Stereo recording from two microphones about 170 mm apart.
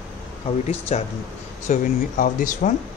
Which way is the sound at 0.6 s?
40° left (ahead or behind).